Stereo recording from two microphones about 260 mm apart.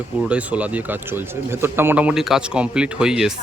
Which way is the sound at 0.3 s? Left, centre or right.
Centre.